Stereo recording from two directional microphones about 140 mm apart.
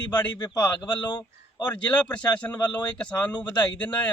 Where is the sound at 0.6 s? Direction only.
30° left (ahead or behind).